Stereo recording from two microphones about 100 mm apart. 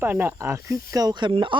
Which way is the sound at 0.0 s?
25° right (ahead or behind).